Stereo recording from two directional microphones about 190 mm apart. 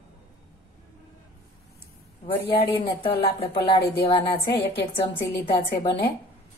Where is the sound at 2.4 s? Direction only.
55° left (ahead or behind).